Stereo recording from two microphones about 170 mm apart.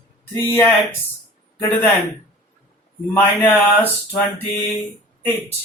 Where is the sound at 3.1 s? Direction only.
10° left (ahead or behind).